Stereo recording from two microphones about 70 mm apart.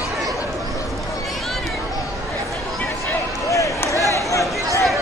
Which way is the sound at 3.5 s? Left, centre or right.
Left.